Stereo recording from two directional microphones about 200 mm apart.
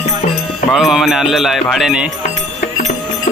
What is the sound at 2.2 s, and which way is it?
Music, 40° left (ahead or behind).